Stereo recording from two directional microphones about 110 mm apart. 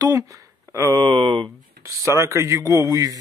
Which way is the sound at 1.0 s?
45° right (ahead or behind).